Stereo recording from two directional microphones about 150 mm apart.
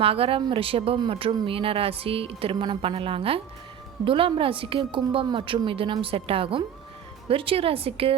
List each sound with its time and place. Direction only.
0.0 s speech: 40° right (ahead or behind)